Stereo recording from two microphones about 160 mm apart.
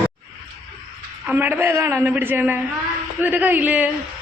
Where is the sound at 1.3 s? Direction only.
10° right (ahead or behind).